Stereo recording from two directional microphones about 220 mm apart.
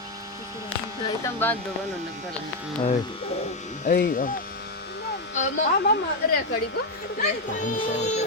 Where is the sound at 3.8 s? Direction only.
40° left (ahead or behind).